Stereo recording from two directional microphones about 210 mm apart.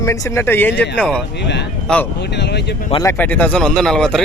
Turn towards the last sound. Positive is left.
turn(degrees=0)  # may be behind; listen again after turning